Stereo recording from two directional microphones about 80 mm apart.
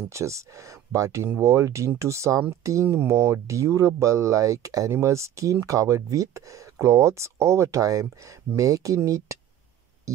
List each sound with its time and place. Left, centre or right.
0.1 s speech: right